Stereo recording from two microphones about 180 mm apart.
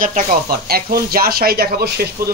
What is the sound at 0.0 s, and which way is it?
Speech, 45° right (ahead or behind).